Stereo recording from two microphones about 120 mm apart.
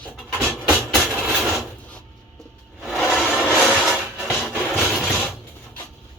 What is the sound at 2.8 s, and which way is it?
Music, centre (ahead or behind).